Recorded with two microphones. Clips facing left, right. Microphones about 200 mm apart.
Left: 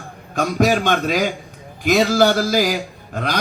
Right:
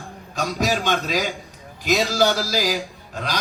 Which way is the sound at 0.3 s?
55° left (ahead or behind).